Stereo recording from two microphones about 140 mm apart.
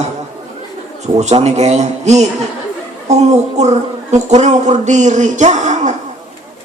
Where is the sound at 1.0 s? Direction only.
55° right (ahead or behind).